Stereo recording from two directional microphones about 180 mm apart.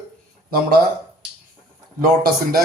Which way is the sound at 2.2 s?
55° right (ahead or behind).